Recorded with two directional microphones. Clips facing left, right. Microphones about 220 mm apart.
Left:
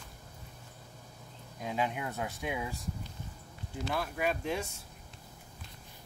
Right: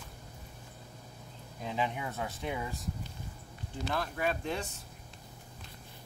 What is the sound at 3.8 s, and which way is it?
Speech, 5° left (ahead or behind).